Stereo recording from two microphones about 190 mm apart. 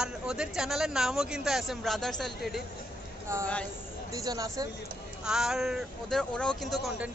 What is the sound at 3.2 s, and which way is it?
Speech, 15° right (ahead or behind).